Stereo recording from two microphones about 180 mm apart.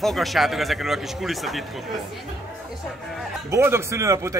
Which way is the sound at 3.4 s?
15° right (ahead or behind).